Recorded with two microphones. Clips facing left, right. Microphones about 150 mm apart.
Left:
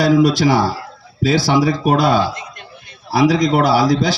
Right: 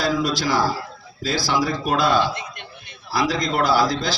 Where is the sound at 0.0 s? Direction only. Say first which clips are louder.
Left 9 dB; 70° left (ahead or behind).